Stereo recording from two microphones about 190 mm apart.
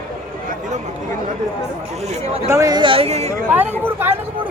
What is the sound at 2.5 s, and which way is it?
Speech, 15° right (ahead or behind).